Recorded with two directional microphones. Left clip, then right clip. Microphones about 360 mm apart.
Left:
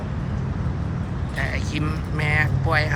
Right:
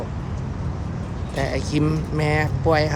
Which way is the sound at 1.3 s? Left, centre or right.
Centre.